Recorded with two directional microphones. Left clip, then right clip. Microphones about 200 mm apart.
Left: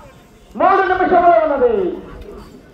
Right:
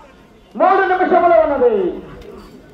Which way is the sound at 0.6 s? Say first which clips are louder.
Even; 40° right (ahead or behind).